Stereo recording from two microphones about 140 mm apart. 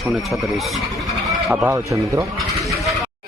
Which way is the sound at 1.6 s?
20° right (ahead or behind).